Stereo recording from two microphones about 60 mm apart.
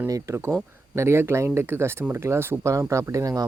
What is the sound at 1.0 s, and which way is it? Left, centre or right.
Speech, right.